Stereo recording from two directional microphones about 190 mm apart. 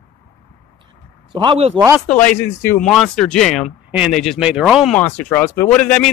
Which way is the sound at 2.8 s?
Centre (ahead or behind).